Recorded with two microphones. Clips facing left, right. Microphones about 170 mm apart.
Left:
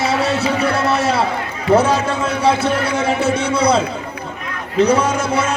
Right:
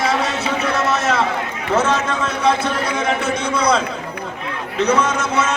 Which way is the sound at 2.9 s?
10° left (ahead or behind).